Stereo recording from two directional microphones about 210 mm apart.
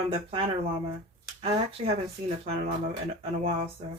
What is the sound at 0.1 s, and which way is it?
Speech, 25° right (ahead or behind).